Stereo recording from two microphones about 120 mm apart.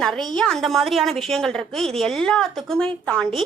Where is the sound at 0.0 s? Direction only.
5° left (ahead or behind).